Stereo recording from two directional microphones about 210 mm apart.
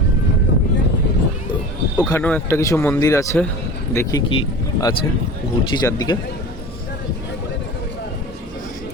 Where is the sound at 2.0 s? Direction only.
10° left (ahead or behind).